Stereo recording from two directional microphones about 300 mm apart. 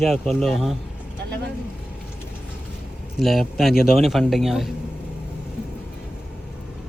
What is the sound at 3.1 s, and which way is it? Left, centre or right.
A man's voice, centre.